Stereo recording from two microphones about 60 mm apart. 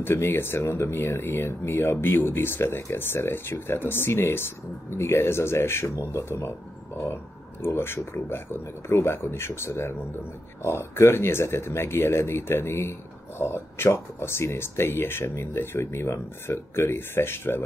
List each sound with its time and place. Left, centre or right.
0.0 s speech: left
7.6 s speech: left